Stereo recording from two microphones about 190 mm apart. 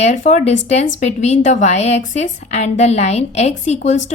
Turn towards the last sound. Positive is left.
turn(degrees=35)  # may be behind; listen again after turning